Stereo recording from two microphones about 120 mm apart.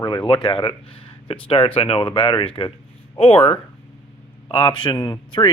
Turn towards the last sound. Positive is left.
turn(degrees=40)  # may be behind; listen again after turning